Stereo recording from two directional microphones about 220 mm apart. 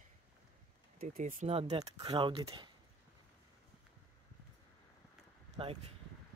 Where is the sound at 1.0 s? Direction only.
40° right (ahead or behind); by 2.7 s 25° right (ahead or behind).